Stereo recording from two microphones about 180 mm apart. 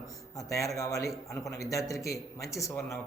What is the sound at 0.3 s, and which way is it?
Speech, 15° left (ahead or behind).